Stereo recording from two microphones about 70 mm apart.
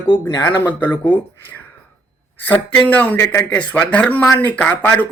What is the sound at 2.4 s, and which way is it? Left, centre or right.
Speech, left.